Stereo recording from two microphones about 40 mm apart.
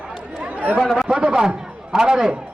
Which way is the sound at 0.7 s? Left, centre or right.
Centre.